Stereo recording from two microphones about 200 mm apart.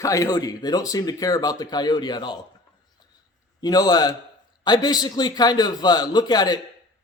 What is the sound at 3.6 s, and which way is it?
Speech, 20° left (ahead or behind).